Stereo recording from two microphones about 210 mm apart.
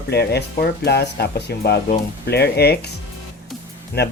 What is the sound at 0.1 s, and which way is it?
Speech, 50° left (ahead or behind).